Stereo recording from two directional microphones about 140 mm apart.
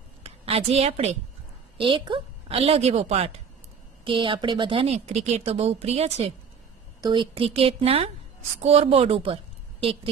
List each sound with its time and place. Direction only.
0.2 s a woman's voice: 45° right (ahead or behind)
1.8 s a woman's voice: 35° right (ahead or behind)
4.0 s a woman's voice: 40° right (ahead or behind)
7.0 s a woman's voice: 35° right (ahead or behind)